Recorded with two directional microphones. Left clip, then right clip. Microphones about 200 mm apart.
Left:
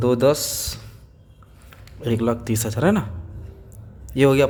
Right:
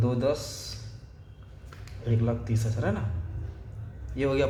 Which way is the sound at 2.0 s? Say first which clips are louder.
Left 9 dB; 60° left (ahead or behind).